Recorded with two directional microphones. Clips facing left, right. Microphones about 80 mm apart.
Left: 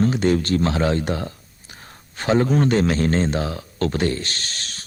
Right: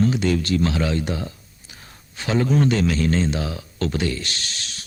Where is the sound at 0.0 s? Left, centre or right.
Left.